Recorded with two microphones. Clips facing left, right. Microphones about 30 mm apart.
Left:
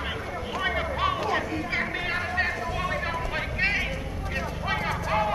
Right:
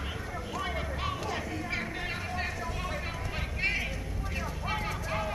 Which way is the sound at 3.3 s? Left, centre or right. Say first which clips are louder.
Left 4 dB; left.